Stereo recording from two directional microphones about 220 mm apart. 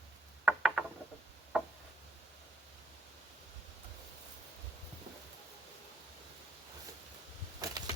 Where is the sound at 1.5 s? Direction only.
Centre (ahead or behind).